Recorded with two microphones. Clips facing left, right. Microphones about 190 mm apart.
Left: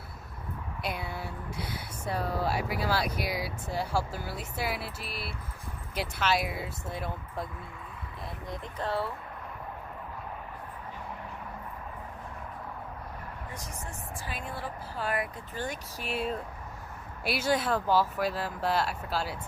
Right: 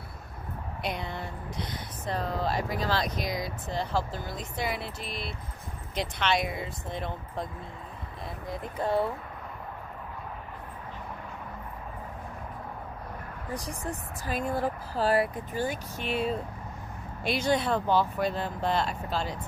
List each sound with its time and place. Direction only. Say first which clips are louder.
0.8 s speech: right 2 dB; 5° left (ahead or behind)
8.5 s speech: right 4 dB; 10° right (ahead or behind)
13.5 s speech: right 12 dB; 35° right (ahead or behind)
15.3 s speech: right 5 dB; 10° right (ahead or behind)
16.0 s speech: right 3 dB; 5° left (ahead or behind)